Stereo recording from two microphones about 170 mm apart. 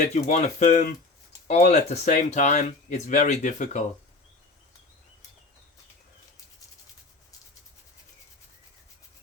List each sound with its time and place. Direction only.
0.0 s speech: 45° left (ahead or behind)